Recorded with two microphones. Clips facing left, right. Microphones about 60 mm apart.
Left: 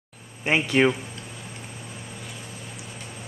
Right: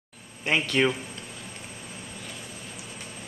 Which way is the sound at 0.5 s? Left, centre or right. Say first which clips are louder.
Left 3 dB; centre.